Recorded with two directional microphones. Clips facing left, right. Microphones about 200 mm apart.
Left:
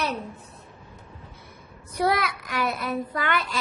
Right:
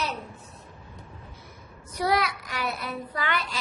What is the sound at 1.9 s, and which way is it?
A child's voice, 55° left (ahead or behind).